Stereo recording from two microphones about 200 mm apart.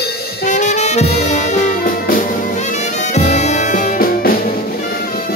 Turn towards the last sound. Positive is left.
turn(degrees=45)  # may be behind; listen again after turning